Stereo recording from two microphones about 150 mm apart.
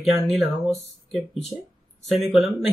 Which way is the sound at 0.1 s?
Centre (ahead or behind).